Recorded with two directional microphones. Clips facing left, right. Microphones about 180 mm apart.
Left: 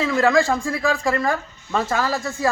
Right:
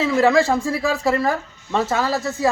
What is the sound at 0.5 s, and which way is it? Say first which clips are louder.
Speech: right 1 dB; 25° right (ahead or behind).